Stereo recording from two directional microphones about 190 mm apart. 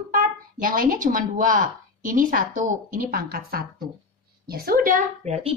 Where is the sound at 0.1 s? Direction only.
45° right (ahead or behind).